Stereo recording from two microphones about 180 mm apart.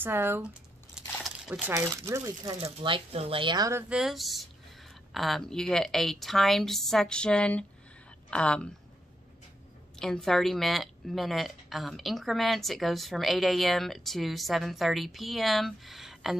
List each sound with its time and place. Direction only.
0.0 s speech: 10° right (ahead or behind)
2.6 s speech: 30° right (ahead or behind)
3.9 s speech: centre (ahead or behind)
9.9 s speech: centre (ahead or behind)